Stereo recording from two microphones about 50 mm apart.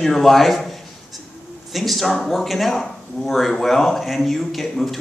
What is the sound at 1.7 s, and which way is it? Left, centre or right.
A man's voice, centre.